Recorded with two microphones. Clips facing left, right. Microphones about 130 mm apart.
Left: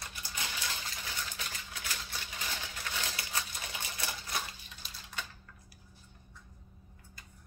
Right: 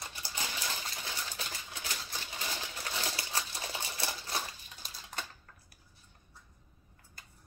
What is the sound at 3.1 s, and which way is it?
Typewriter, 30° right (ahead or behind).